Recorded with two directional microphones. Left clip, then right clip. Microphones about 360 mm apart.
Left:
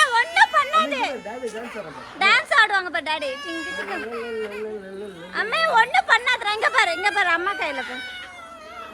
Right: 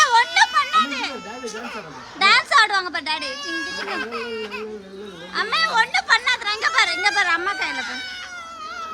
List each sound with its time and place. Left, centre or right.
0.0 s a sound: centre
2.1 s a woman's voice: centre
3.5 s speech: centre
5.3 s a woman's voice: centre